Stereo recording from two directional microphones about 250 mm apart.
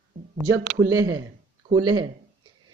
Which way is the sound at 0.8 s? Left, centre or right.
Centre.